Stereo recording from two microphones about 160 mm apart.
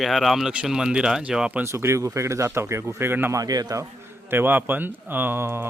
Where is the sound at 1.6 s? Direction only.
15° right (ahead or behind).